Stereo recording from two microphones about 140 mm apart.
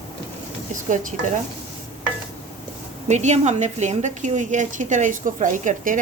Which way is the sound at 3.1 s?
55° right (ahead or behind).